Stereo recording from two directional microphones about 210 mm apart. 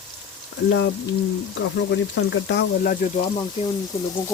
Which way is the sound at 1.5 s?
60° left (ahead or behind).